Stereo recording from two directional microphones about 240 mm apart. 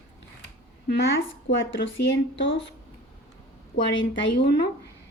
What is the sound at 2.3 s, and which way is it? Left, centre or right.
Speech, left.